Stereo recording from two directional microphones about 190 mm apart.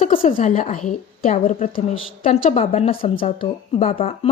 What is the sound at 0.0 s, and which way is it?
A woman's voice, 30° left (ahead or behind).